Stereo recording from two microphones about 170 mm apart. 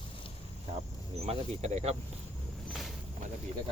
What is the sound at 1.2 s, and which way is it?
Speech, 40° right (ahead or behind).